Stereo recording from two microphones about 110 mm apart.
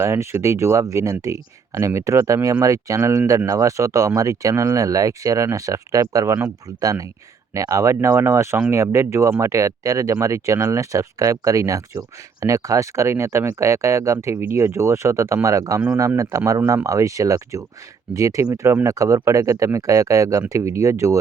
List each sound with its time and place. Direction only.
0.0 s speech: 25° right (ahead or behind)